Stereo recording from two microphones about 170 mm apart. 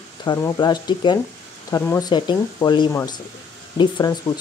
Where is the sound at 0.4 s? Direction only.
25° left (ahead or behind).